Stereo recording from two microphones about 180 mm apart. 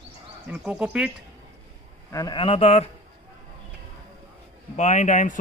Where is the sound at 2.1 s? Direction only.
20° left (ahead or behind).